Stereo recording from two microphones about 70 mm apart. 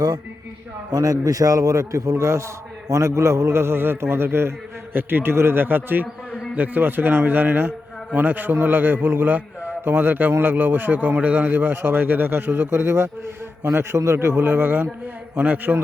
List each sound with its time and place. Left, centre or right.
0.9 s a man's voice: right
14.5 s a man's voice: centre